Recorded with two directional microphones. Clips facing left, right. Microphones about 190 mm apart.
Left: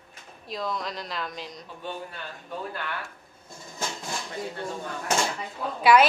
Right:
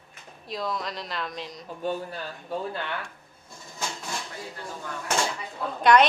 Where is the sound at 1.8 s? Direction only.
40° right (ahead or behind).